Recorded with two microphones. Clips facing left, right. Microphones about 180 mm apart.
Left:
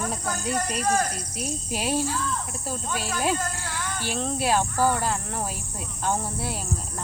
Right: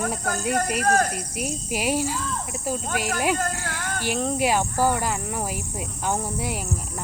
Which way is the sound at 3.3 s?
50° right (ahead or behind).